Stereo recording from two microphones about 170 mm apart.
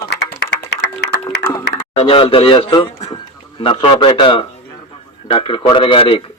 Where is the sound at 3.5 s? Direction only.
30° left (ahead or behind).